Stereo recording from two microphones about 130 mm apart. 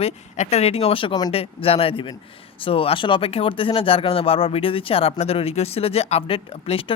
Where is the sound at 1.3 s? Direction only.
45° left (ahead or behind).